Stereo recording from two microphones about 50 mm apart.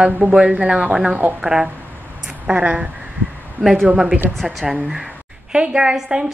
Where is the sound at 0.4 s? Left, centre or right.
Right.